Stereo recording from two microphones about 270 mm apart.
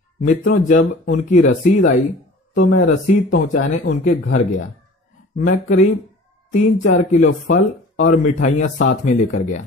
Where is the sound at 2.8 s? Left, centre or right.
Left.